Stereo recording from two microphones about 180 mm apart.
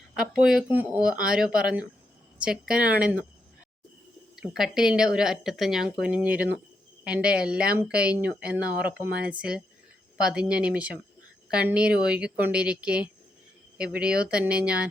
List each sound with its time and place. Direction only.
0.2 s speech: 5° right (ahead or behind)
4.4 s speech: 5° right (ahead or behind)